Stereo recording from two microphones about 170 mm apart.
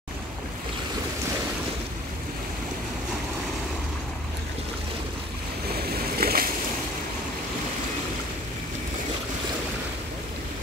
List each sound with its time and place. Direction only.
5.8 s boat: 65° right (ahead or behind)